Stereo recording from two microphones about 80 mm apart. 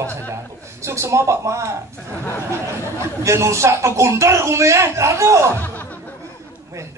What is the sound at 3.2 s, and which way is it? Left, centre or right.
A man's voice, right.